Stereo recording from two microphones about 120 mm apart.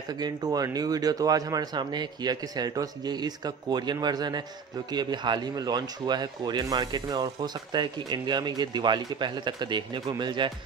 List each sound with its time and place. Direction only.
0.2 s speech: 35° right (ahead or behind)